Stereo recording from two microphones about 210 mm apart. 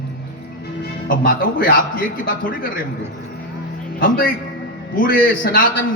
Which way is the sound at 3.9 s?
40° left (ahead or behind).